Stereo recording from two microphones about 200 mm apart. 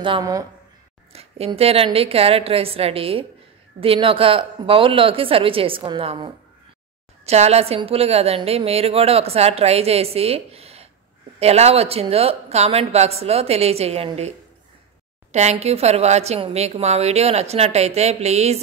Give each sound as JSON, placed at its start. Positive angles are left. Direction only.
{"t": 0.0, "sound": "a woman's voice", "side_deg": -20}
{"t": 1.1, "sound": "a woman's voice", "side_deg": -30}
{"t": 15.3, "sound": "a woman's voice", "side_deg": -30}